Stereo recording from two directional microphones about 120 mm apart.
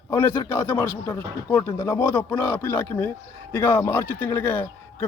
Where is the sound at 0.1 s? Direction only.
15° left (ahead or behind).